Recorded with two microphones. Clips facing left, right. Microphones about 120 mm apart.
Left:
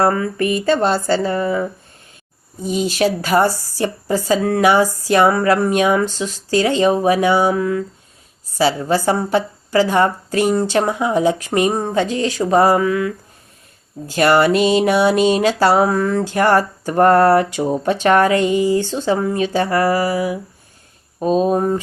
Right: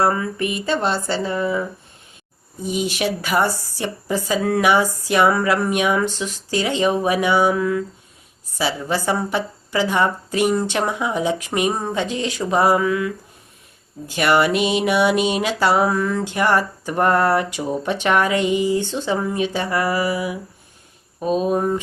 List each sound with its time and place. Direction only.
0.0 s a woman's voice: 45° left (ahead or behind)
2.6 s a woman's voice: 35° left (ahead or behind)